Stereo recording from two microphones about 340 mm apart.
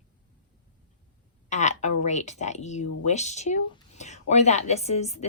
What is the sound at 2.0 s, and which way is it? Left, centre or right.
Speech, left.